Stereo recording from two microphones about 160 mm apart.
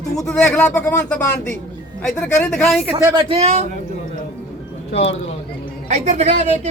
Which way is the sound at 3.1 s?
30° right (ahead or behind).